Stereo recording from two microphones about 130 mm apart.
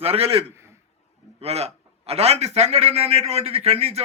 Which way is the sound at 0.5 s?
20° right (ahead or behind).